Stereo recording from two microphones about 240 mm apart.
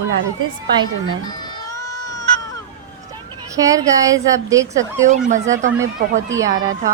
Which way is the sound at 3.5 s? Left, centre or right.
Centre.